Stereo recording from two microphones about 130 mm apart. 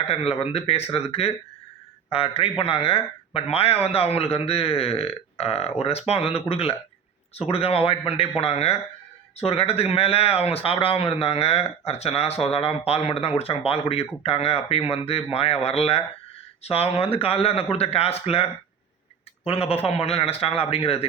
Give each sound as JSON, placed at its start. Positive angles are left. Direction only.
{"t": 0.1, "sound": "speech", "side_deg": 50}